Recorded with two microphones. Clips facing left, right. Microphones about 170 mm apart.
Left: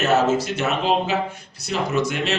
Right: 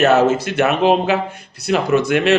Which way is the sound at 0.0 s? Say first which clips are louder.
Right 5 dB; 60° right (ahead or behind).